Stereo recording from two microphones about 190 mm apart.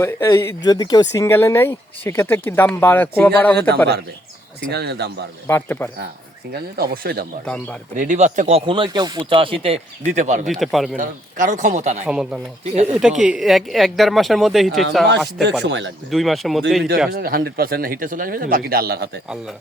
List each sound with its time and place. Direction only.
0.0 s speech: 15° left (ahead or behind)
4.7 s speech: 60° right (ahead or behind)
5.5 s speech: 10° left (ahead or behind)
6.5 s speech: 50° right (ahead or behind)
7.4 s speech: 5° left (ahead or behind)
7.9 s speech: 40° right (ahead or behind)
10.4 s speech: centre (ahead or behind)
10.9 s speech: 45° right (ahead or behind)
12.0 s speech: 5° right (ahead or behind)
15.6 s speech: 70° right (ahead or behind)
16.0 s speech: centre (ahead or behind)
17.1 s speech: 50° right (ahead or behind)